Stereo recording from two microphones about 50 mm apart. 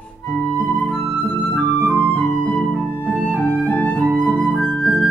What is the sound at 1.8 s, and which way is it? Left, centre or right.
Music, right.